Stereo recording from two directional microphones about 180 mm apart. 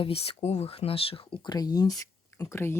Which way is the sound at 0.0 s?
35° left (ahead or behind).